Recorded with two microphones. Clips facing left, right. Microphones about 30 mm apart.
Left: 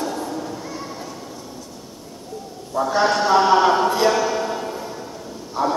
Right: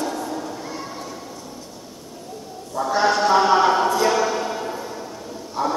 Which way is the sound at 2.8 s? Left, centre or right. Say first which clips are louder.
Even; centre.